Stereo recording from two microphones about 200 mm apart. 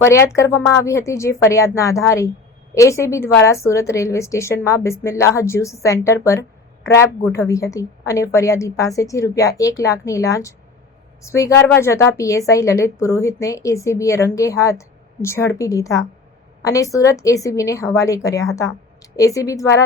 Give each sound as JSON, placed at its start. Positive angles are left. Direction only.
{"t": 0.3, "sound": "a woman's voice", "side_deg": 15}